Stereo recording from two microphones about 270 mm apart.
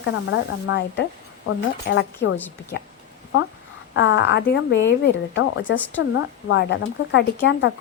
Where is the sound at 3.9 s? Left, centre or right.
Left.